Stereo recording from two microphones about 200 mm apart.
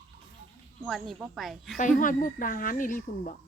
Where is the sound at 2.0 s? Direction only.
40° left (ahead or behind).